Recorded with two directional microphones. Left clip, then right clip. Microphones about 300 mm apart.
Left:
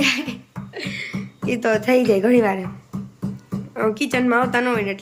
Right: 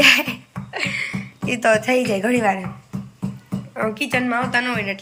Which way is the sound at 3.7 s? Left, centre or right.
Centre.